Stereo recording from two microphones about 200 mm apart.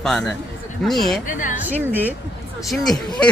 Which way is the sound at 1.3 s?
40° left (ahead or behind).